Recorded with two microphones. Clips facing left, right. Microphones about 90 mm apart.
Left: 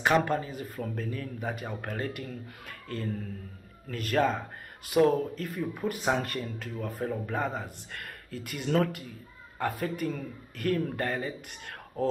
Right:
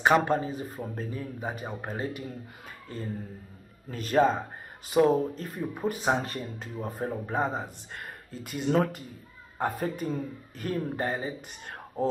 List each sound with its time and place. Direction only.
0.1 s speech: 25° right (ahead or behind)
3.9 s speech: 25° right (ahead or behind)